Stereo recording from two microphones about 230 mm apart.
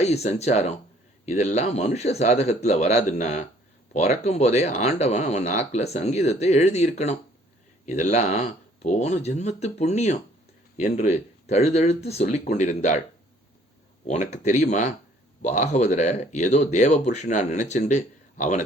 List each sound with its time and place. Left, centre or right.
0.3 s speech: left
14.1 s speech: left